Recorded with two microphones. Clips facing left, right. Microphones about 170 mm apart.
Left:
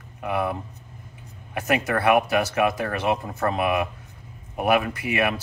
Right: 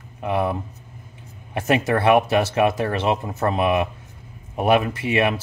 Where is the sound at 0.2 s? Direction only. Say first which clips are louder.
Right 3 dB; 30° right (ahead or behind).